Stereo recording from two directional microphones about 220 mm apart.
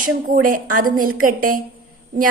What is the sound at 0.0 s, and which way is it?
A woman's voice, 40° right (ahead or behind).